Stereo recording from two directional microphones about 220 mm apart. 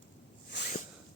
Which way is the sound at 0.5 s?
50° left (ahead or behind).